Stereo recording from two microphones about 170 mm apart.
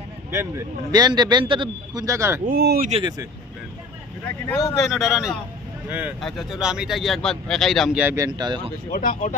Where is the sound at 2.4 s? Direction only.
60° right (ahead or behind).